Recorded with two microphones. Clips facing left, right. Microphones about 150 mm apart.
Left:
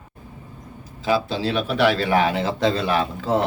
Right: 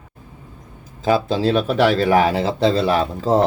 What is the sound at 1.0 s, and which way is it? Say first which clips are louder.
Speech: right 4 dB; 45° right (ahead or behind).